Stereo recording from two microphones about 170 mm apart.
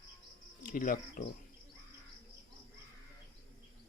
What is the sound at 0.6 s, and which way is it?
Speech, 50° left (ahead or behind).